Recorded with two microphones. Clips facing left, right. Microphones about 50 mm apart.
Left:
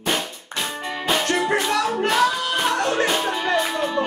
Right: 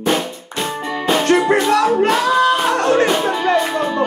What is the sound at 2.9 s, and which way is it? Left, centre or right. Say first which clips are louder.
Music: right 6 dB; centre.